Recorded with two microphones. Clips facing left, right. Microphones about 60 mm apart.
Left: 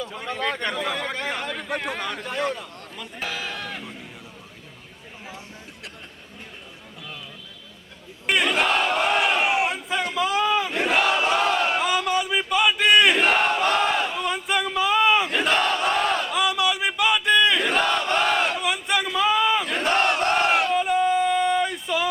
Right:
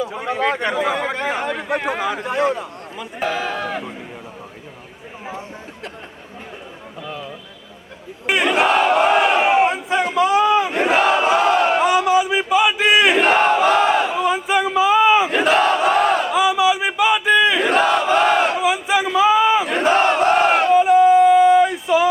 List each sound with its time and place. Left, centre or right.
0.0 s a man's voice: centre
3.3 s speech: right
8.3 s battle cry: centre
9.6 s crowd: centre
10.8 s battle cry: centre